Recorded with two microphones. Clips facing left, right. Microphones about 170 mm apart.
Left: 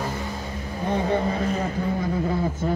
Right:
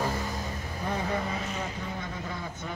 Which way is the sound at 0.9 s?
30° left (ahead or behind).